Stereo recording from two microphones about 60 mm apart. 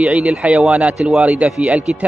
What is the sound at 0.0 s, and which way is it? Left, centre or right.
Speech, right.